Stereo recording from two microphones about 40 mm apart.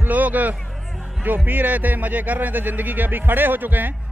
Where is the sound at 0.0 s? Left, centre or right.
Right.